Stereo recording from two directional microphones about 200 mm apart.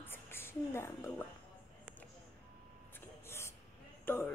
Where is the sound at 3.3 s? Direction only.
15° left (ahead or behind).